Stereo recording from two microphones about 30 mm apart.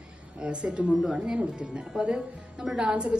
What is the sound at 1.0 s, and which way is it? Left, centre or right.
Speech, centre.